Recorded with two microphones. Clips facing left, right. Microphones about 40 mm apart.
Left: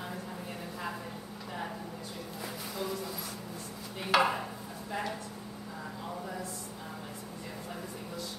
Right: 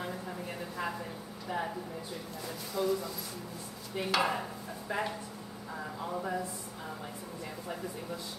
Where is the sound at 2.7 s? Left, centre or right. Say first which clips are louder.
Right 6 dB; centre.